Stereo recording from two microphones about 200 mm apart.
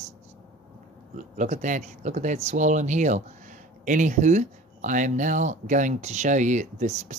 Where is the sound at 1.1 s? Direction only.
40° right (ahead or behind).